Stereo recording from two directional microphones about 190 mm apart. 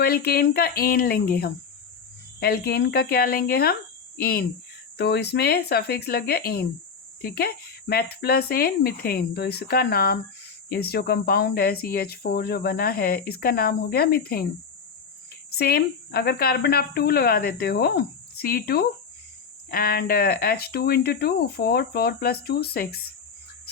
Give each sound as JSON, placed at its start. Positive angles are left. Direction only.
{"t": 0.0, "sound": "speech", "side_deg": 55}
{"t": 15.5, "sound": "speech", "side_deg": 55}